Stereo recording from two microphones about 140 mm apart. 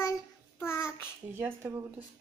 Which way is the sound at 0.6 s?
15° left (ahead or behind).